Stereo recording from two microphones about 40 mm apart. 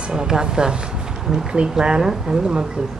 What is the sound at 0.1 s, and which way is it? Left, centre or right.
Speech, centre.